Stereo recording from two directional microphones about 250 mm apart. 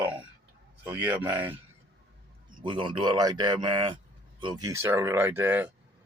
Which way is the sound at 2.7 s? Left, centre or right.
Centre.